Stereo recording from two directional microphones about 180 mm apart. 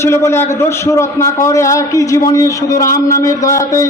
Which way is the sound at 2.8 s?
50° left (ahead or behind).